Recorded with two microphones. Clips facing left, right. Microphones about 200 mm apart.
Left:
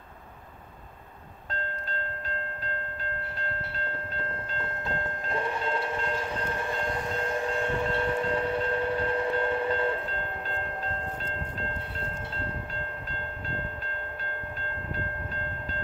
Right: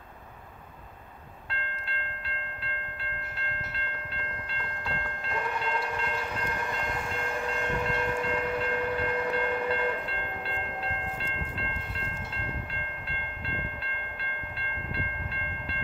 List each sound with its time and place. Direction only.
1.5 s train: 40° left (ahead or behind)
4.6 s train: 20° left (ahead or behind)
14.6 s train: 45° left (ahead or behind)